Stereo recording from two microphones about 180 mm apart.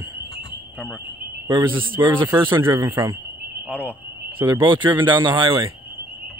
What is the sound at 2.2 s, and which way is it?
Speech, 25° right (ahead or behind).